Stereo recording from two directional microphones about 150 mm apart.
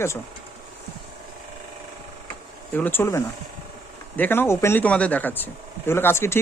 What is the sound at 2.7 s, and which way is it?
Speech, 10° left (ahead or behind).